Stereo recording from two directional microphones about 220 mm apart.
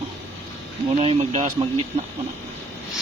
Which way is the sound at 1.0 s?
25° right (ahead or behind).